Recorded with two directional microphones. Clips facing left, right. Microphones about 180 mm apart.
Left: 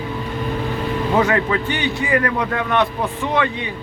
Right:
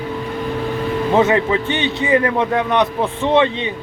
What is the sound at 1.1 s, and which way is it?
A man's voice, 20° right (ahead or behind).